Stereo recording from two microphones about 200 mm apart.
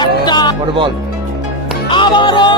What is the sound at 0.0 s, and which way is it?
Music, 20° left (ahead or behind).